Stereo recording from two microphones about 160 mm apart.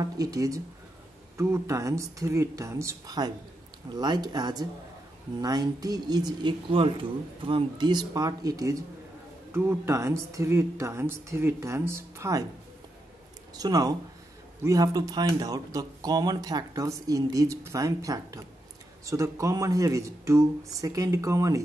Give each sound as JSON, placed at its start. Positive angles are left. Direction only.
{"t": 0.0, "sound": "speech", "side_deg": -25}
{"t": 13.6, "sound": "speech", "side_deg": -25}